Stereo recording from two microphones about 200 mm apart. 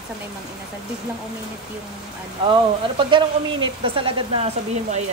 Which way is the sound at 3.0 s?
25° right (ahead or behind).